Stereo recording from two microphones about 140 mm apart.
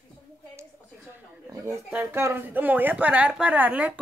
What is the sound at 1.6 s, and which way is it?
A woman's voice, 15° right (ahead or behind).